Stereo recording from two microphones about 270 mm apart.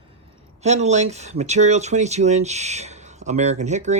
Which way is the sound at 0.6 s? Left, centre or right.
Right.